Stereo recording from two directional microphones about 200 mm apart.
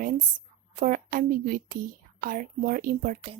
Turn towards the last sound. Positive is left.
turn(degrees=-45)  # may be behind; listen again after turning